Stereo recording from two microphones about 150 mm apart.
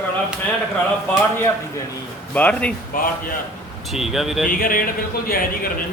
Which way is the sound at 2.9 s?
70° left (ahead or behind).